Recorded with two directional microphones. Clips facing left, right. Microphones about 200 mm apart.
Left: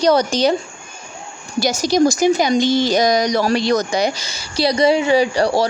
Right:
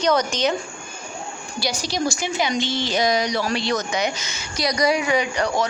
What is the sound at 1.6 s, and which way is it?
Speech, 45° left (ahead or behind).